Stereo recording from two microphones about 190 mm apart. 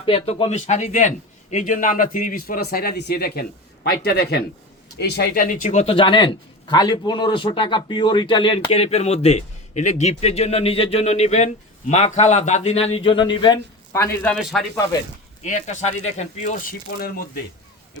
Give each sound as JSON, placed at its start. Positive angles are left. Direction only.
{"t": 0.0, "sound": "a man's voice", "side_deg": 30}
{"t": 15.4, "sound": "speech", "side_deg": 40}
{"t": 17.0, "sound": "a man's voice", "side_deg": 50}